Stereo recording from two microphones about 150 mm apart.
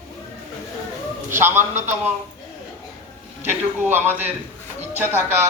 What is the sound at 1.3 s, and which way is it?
Speech, 15° right (ahead or behind).